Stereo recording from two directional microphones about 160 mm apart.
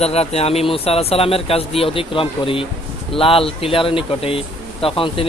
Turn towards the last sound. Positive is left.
turn(degrees=35)  # may be behind; listen again after turning